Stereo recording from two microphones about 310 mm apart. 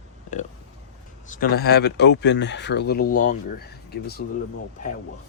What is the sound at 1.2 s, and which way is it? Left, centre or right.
Speech, left.